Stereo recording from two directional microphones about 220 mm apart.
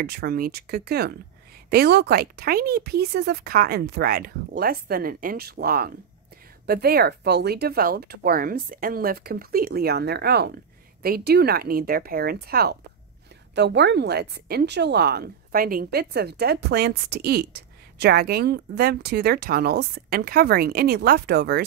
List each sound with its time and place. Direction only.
0.0 s a woman's voice: 45° right (ahead or behind)